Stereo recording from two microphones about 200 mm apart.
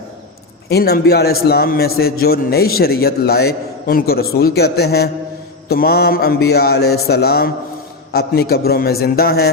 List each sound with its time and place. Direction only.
0.7 s a man's voice: 50° left (ahead or behind)